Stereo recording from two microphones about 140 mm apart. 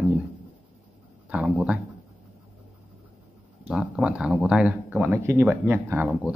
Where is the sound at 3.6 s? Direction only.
5° right (ahead or behind).